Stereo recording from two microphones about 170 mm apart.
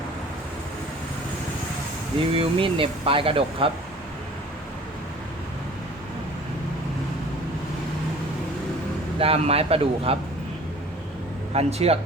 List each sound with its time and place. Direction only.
2.1 s speech: 30° right (ahead or behind)
9.1 s speech: 35° right (ahead or behind)
11.5 s speech: 35° right (ahead or behind)